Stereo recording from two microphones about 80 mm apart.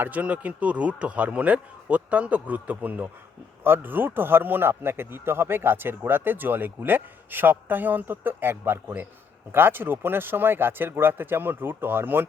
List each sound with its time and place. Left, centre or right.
0.0 s a man's voice: centre